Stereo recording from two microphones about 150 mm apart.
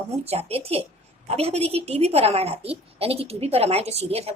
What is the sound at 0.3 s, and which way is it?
A woman's voice, 40° right (ahead or behind).